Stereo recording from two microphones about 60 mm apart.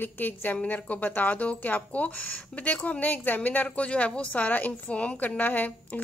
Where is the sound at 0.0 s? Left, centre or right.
Left.